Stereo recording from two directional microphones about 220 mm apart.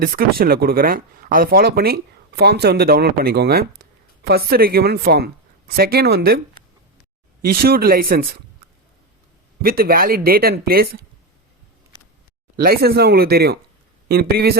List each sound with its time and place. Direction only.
0.0 s speech: 45° right (ahead or behind)
7.4 s speech: 45° right (ahead or behind)
9.6 s speech: 45° right (ahead or behind)
12.6 s speech: 45° right (ahead or behind)